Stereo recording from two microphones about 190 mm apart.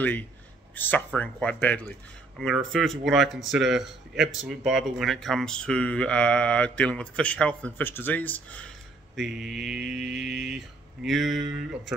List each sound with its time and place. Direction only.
0.7 s speech: 10° left (ahead or behind)
10.1 s mantra: 60° right (ahead or behind)
10.4 s speech: centre (ahead or behind)